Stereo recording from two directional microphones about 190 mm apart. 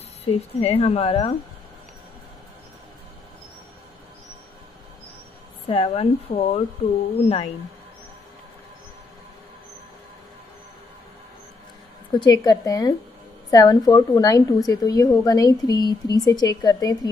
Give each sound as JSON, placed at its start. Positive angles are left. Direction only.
{"t": 0.2, "sound": "a woman's voice", "side_deg": 30}
{"t": 5.7, "sound": "a woman's voice", "side_deg": 30}
{"t": 12.1, "sound": "a woman's voice", "side_deg": 20}